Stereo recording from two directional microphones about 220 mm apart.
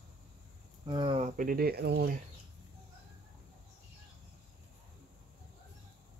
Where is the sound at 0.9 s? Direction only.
25° right (ahead or behind); by 2.2 s 45° right (ahead or behind).